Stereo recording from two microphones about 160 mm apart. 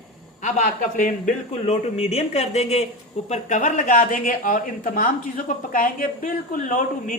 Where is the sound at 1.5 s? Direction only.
45° left (ahead or behind).